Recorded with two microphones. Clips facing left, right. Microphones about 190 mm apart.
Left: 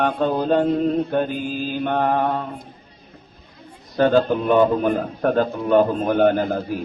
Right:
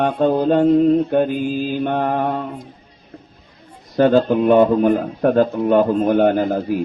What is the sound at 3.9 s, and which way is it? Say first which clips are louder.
A man's voice: right 3 dB; 35° right (ahead or behind).